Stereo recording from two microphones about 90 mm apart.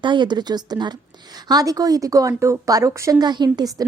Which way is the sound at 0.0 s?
60° right (ahead or behind).